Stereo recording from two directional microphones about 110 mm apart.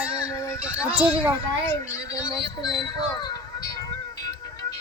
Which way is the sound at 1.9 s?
30° left (ahead or behind).